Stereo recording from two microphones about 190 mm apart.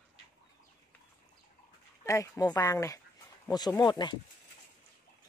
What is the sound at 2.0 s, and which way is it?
Speech, 15° left (ahead or behind).